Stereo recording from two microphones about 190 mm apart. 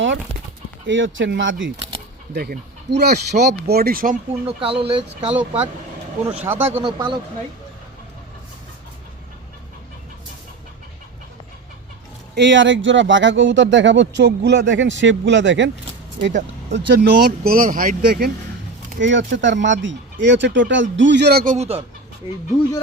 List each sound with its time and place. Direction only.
0.9 s speech: 80° right
2.3 s speech: 55° right (ahead or behind)
4.4 s speech: 30° right (ahead or behind)
5.3 s speech: 10° right (ahead or behind)
12.3 s speech: 70° right (ahead or behind)
16.7 s speech: 60° right (ahead or behind)
18.9 s speech: 70° right (ahead or behind); by 21.8 s 35° right (ahead or behind)